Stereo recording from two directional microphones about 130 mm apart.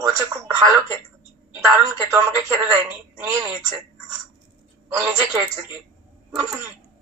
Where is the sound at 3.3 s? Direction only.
25° right (ahead or behind).